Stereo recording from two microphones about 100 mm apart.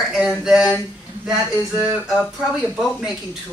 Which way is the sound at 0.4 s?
5° right (ahead or behind).